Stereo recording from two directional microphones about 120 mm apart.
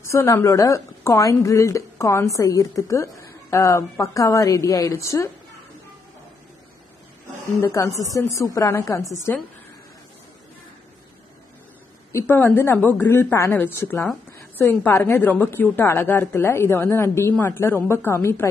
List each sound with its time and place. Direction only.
0.0 s a woman's voice: 25° left (ahead or behind)
7.6 s a woman's voice: 25° left (ahead or behind)
12.1 s a woman's voice: 20° left (ahead or behind)